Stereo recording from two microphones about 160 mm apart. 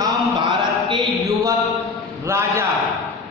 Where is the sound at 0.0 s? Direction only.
30° right (ahead or behind).